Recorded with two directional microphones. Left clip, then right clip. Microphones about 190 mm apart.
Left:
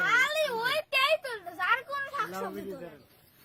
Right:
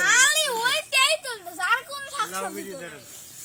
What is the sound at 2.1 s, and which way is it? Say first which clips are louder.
Speech: right 8 dB; 10° left (ahead or behind).